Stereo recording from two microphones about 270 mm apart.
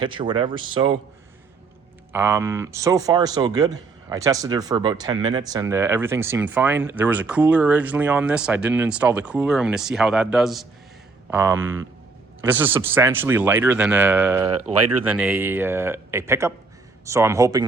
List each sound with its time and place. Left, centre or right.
0.0 s speech: centre
2.1 s a man's voice: centre